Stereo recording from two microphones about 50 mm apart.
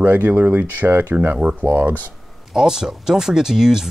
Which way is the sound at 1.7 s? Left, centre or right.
Right.